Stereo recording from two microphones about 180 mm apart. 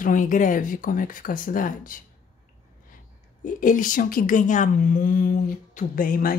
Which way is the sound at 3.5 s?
45° left (ahead or behind).